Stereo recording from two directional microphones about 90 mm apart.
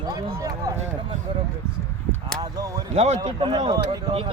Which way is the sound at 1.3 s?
65° right (ahead or behind).